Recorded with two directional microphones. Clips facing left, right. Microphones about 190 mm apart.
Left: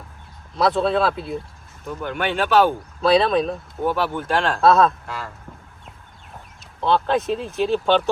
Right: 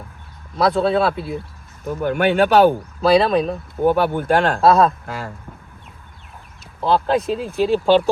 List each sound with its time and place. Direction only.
0.5 s speech: centre (ahead or behind)
1.9 s speech: 50° right (ahead or behind)
3.0 s speech: centre (ahead or behind)
3.8 s speech: 55° right (ahead or behind)
4.6 s speech: centre (ahead or behind)
5.0 s speech: 50° right (ahead or behind)
6.7 s speech: centre (ahead or behind)